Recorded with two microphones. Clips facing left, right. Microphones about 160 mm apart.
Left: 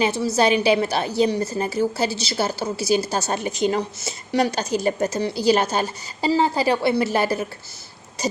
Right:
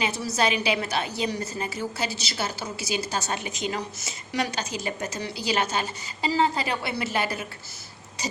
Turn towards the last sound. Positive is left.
turn(degrees=35)  # may be behind; listen again after turning